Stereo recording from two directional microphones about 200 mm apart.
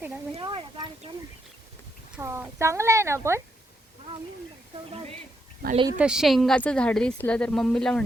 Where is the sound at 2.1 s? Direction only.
10° right (ahead or behind).